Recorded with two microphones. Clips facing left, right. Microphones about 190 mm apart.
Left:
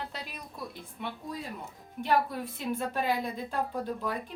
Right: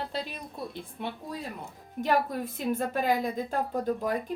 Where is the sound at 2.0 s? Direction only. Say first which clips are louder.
Right 1 dB; 45° right (ahead or behind).